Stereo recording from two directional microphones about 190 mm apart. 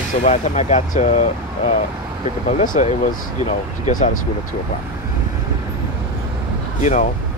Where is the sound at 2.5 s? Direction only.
40° left (ahead or behind).